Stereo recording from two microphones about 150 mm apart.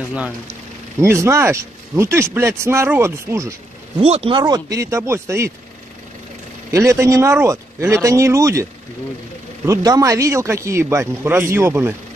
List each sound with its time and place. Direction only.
1.0 s speech: 15° right (ahead or behind)
4.0 s speech: 40° right (ahead or behind); by 5.5 s 20° right (ahead or behind)
6.7 s speech: 20° right (ahead or behind)
9.7 s speech: 25° right (ahead or behind)